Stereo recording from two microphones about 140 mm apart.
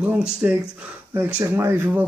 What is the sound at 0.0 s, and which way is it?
Speech, 10° right (ahead or behind).